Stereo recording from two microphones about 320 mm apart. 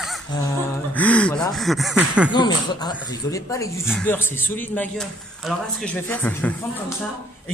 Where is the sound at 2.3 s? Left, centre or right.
Centre.